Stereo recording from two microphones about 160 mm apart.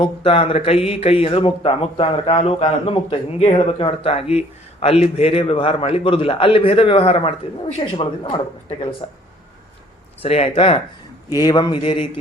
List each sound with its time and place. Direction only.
0.0 s speech: 35° left (ahead or behind)
10.2 s speech: 40° left (ahead or behind)
11.3 s a man's voice: 25° left (ahead or behind)